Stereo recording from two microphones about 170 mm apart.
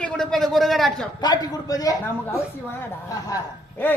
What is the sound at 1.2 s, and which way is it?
A man's voice, 20° left (ahead or behind).